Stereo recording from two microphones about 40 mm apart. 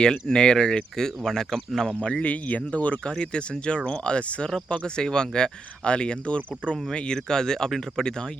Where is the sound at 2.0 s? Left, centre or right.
Left.